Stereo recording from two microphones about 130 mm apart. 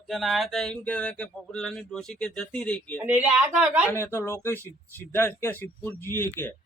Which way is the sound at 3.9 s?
20° left (ahead or behind).